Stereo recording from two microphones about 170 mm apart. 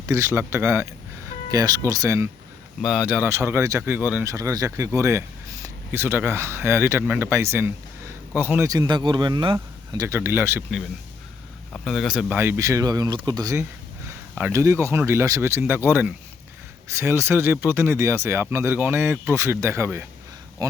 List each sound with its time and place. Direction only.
0.0 s speech: 15° right (ahead or behind)
2.8 s speech: 5° right (ahead or behind)
11.9 s speech: 5° right (ahead or behind); by 20.7 s 20° right (ahead or behind)